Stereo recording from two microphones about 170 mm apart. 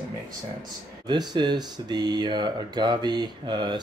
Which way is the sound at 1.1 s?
25° right (ahead or behind).